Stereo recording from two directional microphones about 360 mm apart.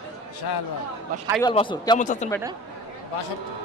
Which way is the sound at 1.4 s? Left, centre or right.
Centre.